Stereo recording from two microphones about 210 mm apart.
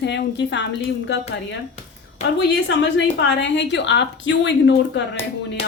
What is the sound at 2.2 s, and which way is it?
Speech, 30° left (ahead or behind).